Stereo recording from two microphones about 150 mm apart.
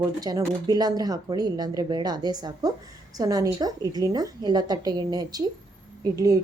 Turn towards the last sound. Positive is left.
turn(degrees=-25)  # may be behind; listen again after turning